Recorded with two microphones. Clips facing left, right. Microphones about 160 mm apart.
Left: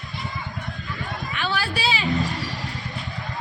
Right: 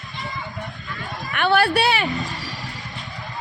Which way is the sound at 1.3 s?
60° right (ahead or behind).